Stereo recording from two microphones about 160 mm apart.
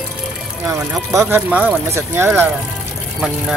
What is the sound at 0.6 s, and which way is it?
Speech, 15° right (ahead or behind).